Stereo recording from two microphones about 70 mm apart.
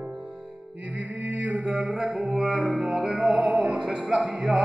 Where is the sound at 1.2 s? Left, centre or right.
Right.